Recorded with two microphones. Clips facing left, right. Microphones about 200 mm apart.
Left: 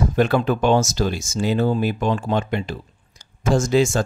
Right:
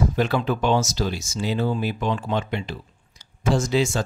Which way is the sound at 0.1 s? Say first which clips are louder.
Left 4 dB; 50° left (ahead or behind).